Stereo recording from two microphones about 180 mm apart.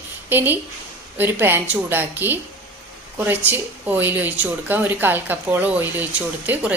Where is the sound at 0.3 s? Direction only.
10° right (ahead or behind).